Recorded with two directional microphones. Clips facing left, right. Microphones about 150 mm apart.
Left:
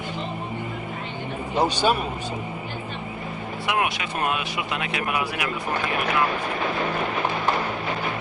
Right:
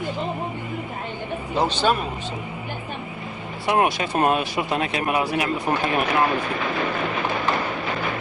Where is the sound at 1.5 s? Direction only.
10° left (ahead or behind).